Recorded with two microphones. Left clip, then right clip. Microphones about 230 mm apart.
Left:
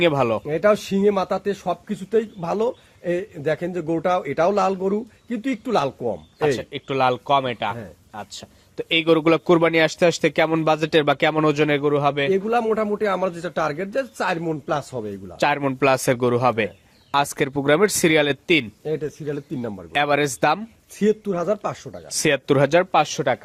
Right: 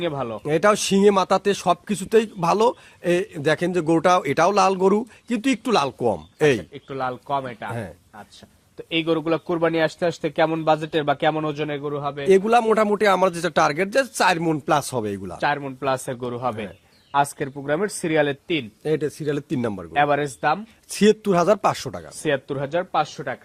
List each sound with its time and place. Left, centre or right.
0.0 s speech: left
0.4 s a man's voice: right
6.6 s speech: left
8.8 s speech: left
12.3 s a man's voice: right
15.4 s speech: left
18.9 s a man's voice: right
19.9 s speech: left
21.0 s a man's voice: right
22.2 s speech: left